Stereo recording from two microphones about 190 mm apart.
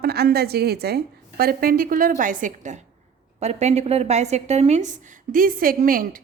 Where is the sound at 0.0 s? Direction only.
55° right (ahead or behind).